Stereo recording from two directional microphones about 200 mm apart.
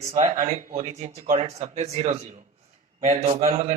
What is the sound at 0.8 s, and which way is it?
A man's voice, 30° right (ahead or behind).